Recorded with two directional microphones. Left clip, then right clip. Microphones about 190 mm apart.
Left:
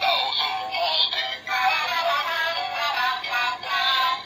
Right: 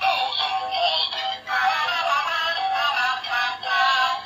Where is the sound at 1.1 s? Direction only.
Centre (ahead or behind).